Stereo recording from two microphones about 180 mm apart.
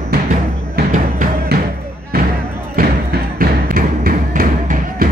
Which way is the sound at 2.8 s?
55° right (ahead or behind).